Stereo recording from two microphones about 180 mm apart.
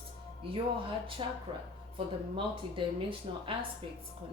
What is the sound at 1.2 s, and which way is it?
Speech, 30° right (ahead or behind).